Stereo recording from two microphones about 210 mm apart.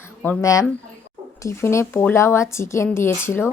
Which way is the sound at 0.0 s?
10° left (ahead or behind).